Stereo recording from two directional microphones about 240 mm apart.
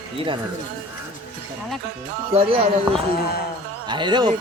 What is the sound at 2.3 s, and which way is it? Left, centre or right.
Speech, right.